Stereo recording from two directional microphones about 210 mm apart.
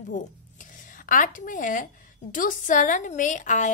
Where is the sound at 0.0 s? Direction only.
35° left (ahead or behind).